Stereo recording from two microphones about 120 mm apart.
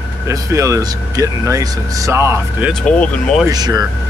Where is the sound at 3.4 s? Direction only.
35° right (ahead or behind).